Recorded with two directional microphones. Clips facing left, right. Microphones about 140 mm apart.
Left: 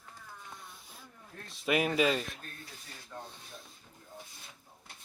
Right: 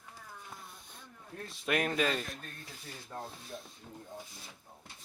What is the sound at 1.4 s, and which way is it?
Speech, centre (ahead or behind).